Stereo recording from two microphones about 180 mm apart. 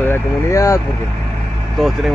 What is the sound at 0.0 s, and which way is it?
Speech, 15° left (ahead or behind).